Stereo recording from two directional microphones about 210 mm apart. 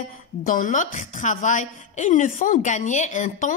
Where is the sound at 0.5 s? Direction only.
40° left (ahead or behind).